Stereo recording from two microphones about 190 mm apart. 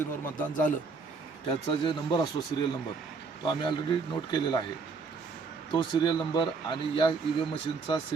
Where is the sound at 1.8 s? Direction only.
20° left (ahead or behind).